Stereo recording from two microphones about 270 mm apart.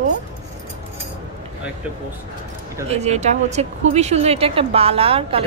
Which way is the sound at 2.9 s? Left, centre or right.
Right.